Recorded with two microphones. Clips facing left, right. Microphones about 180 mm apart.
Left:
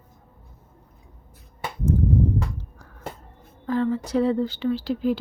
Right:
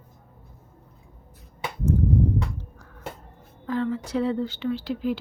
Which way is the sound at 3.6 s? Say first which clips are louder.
Left 3 dB; 40° left (ahead or behind).